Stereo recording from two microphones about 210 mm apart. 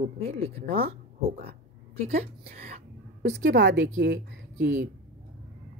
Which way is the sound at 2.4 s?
45° right (ahead or behind).